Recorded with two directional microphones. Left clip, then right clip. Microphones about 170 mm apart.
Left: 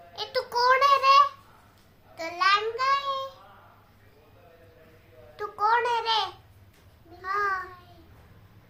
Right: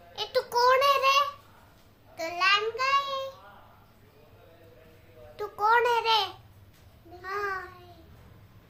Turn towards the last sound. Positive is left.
turn(degrees=-20)  # may be behind; listen again after turning